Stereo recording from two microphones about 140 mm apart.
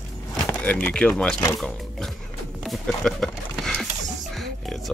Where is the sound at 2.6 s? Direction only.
5° left (ahead or behind).